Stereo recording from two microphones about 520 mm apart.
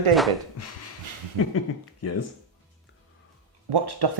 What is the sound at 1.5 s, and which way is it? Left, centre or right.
Speech, left.